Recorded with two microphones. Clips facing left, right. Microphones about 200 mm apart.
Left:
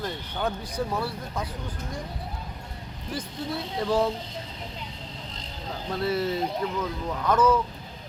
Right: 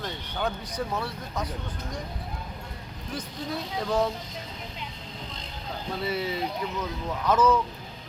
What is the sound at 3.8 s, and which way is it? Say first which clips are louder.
Speech: left 2 dB; 5° left (ahead or behind).